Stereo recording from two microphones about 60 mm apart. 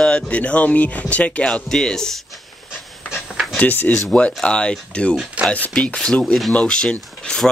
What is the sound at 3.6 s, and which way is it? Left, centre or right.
Speech, left.